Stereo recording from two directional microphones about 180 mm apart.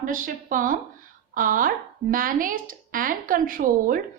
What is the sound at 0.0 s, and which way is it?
A woman's voice, 50° right (ahead or behind).